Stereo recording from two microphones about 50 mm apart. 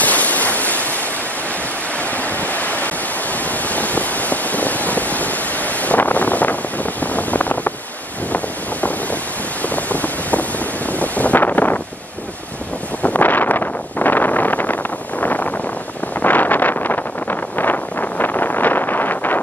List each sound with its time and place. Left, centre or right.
0.0 s waves: left
2.0 s waves: left
3.4 s a sound: left
9.6 s a sound: left
10.9 s wind noise: left
13.0 s vehicle: left